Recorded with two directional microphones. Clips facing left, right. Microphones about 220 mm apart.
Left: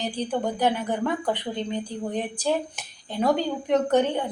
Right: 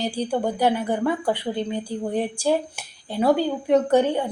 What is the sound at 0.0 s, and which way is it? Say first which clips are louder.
A woman's voice: right 3 dB; 10° right (ahead or behind).